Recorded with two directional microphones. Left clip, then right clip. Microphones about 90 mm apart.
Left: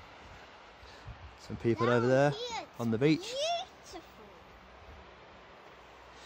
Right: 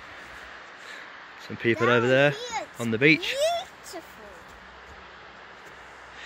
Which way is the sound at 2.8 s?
35° left (ahead or behind).